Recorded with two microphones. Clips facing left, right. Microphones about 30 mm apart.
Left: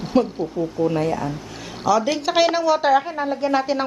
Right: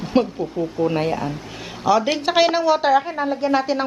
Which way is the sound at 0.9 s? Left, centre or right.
Right.